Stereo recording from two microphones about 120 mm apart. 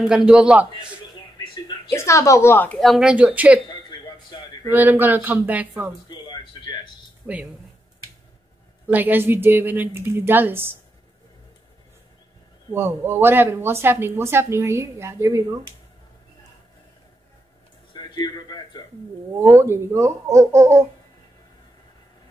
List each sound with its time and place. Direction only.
0.0 s speech: 5° right (ahead or behind)
1.9 s a woman's voice: 25° left (ahead or behind)
2.8 s speech: centre (ahead or behind)
3.6 s a sound: 40° left (ahead or behind)
4.6 s speech: 15° right (ahead or behind)
6.0 s a sound: 35° left (ahead or behind)
7.2 s speech: 5° right (ahead or behind)
8.8 s speech: 15° right (ahead or behind)
12.7 s speech: 20° right (ahead or behind)
17.9 s a sound: 35° left (ahead or behind)
19.3 s speech: 25° right (ahead or behind)